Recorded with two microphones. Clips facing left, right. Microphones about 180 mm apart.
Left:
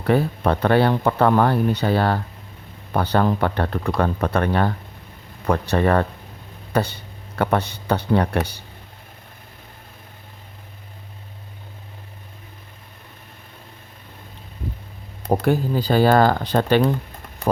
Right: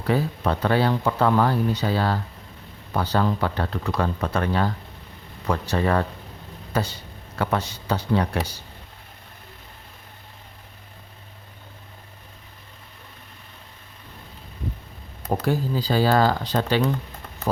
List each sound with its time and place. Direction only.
0.0 s speech: 60° left (ahead or behind)
15.4 s speech: 55° left (ahead or behind)